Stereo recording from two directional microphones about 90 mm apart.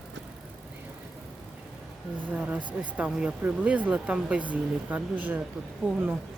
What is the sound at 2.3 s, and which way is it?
Speech, 10° right (ahead or behind).